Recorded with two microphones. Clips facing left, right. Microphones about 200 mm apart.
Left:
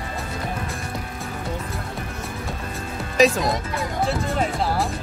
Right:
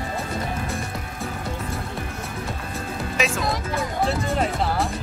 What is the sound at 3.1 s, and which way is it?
Speech, 35° left (ahead or behind).